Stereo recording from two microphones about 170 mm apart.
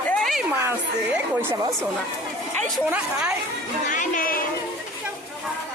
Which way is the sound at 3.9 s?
50° left (ahead or behind).